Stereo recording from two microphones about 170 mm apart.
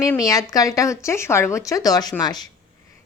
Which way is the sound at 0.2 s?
20° left (ahead or behind).